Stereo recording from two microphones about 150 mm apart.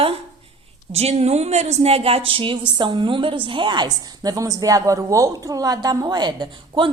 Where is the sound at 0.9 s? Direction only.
45° right (ahead or behind).